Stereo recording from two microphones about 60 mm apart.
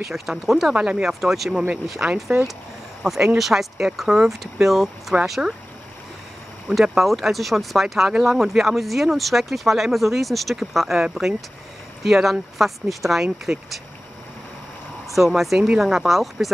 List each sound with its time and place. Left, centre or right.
0.1 s speech: centre
0.7 s speech: centre
1.0 s speech: centre
2.0 s speech: centre
6.7 s speech: centre
15.1 s speech: centre